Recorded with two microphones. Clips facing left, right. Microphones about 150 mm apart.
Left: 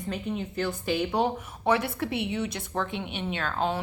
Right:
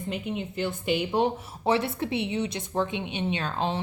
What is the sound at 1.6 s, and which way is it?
A woman's voice, 25° right (ahead or behind).